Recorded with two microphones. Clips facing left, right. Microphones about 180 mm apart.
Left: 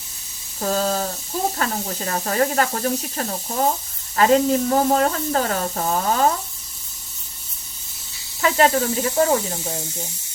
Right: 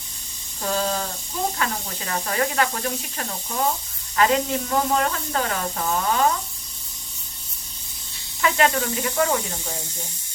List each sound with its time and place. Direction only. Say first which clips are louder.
0.6 s speech: left 3 dB; 40° left (ahead or behind)
8.4 s speech: left 3 dB; 35° left (ahead or behind)